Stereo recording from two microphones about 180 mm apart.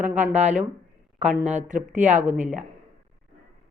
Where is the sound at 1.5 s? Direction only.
40° right (ahead or behind).